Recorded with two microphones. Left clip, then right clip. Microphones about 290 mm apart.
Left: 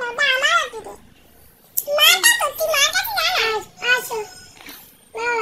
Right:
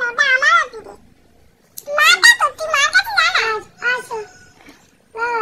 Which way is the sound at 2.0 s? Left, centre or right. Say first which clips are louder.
Right 5 dB; centre.